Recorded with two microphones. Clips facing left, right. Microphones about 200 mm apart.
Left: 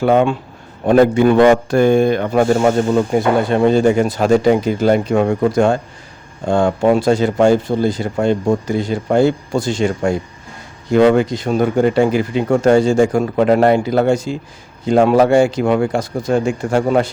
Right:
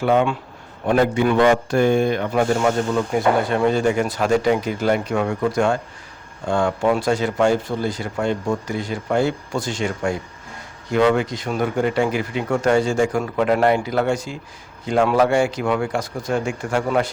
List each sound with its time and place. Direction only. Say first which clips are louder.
0.0 s speech: left 5 dB; 40° left (ahead or behind)